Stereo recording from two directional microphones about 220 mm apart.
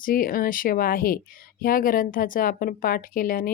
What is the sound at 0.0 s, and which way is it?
A woman's voice, 40° left (ahead or behind).